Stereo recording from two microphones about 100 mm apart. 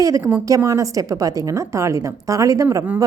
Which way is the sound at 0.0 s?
30° right (ahead or behind).